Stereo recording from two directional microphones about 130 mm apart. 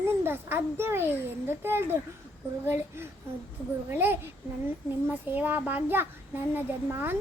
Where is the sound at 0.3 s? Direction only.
15° right (ahead or behind).